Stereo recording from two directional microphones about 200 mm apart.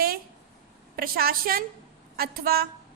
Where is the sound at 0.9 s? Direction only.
50° right (ahead or behind).